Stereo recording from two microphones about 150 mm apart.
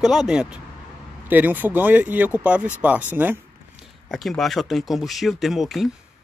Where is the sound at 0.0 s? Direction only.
5° right (ahead or behind).